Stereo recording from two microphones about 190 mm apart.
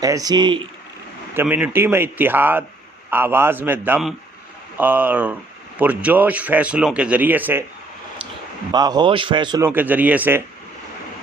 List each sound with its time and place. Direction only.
0.0 s a man's voice: 20° right (ahead or behind)
1.4 s speech: 10° right (ahead or behind)
8.7 s a man's voice: 20° right (ahead or behind)